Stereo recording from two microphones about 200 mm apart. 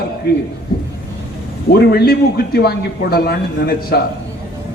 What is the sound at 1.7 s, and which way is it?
A man's voice, 50° left (ahead or behind).